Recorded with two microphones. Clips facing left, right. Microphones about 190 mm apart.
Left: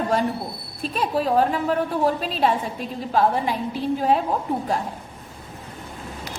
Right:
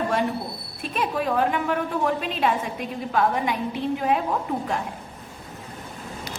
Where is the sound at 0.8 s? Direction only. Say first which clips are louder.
Left 3 dB; 35° left (ahead or behind).